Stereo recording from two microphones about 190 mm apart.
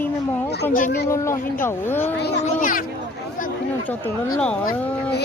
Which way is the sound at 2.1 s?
60° left (ahead or behind).